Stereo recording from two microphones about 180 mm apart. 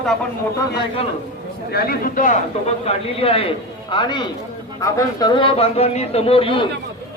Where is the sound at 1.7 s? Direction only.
55° left (ahead or behind).